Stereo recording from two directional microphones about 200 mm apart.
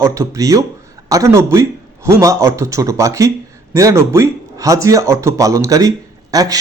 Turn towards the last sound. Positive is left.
turn(degrees=-20)  # may be behind; listen again after turning